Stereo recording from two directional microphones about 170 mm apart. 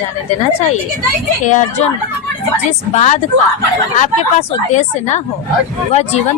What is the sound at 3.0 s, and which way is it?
Speech, 45° left (ahead or behind).